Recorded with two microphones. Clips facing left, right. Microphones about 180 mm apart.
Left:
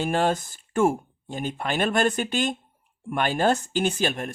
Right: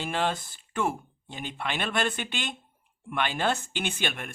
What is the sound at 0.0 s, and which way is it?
Speech, 45° left (ahead or behind).